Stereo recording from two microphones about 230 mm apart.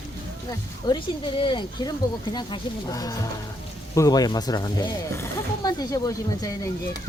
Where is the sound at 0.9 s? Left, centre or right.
Centre.